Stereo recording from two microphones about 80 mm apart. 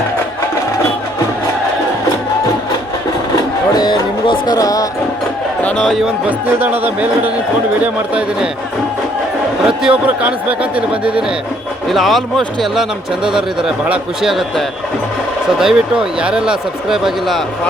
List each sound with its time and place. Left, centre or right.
3.3 s a sound: left
4.5 s speech: left
5.7 s speech: centre
6.5 s speech: right
9.6 s speech: centre
11.9 s speech: centre
14.2 s speech: centre